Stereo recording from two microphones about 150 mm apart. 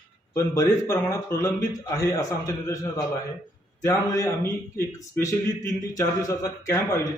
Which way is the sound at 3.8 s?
20° left (ahead or behind).